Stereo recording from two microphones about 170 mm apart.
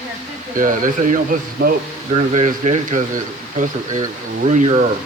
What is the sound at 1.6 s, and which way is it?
Speech, 60° right (ahead or behind).